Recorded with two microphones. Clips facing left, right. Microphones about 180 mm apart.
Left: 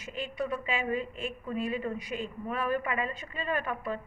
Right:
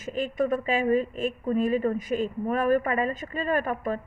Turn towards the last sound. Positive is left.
turn(degrees=-45)  # may be behind; listen again after turning